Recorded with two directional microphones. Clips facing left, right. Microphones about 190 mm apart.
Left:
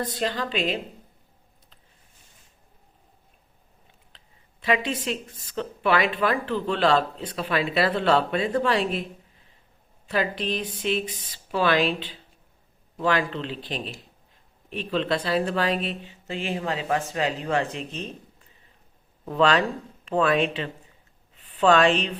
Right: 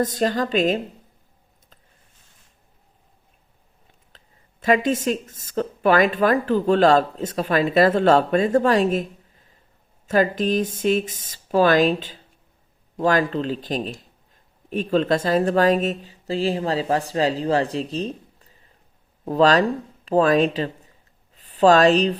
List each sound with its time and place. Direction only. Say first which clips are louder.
0.0 s speech: right 6 dB; 45° right (ahead or behind)
4.1 s a sound: right 3 dB; 45° right (ahead or behind)
4.6 s speech: right 6 dB; 45° right (ahead or behind)
10.1 s speech: right 7 dB; 45° right (ahead or behind)
19.2 s a woman's voice: right 4 dB; 40° right (ahead or behind)